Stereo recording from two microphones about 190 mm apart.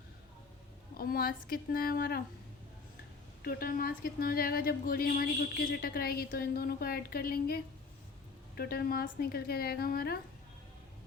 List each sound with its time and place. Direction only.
0.9 s speech: 50° left (ahead or behind)
3.4 s speech: 50° left (ahead or behind)